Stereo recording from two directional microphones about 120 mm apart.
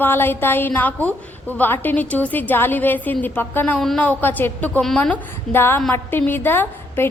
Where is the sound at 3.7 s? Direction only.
Centre (ahead or behind).